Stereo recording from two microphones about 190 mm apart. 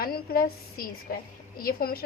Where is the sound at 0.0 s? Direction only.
50° left (ahead or behind).